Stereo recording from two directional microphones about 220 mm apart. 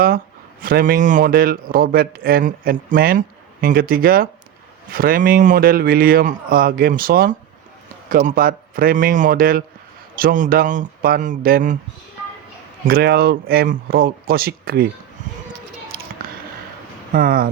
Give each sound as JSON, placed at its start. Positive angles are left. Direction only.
{"t": 0.6, "sound": "a man's voice", "side_deg": -40}
{"t": 12.8, "sound": "speech", "side_deg": -45}
{"t": 15.9, "sound": "squish", "side_deg": -45}
{"t": 17.1, "sound": "a man's voice", "side_deg": -40}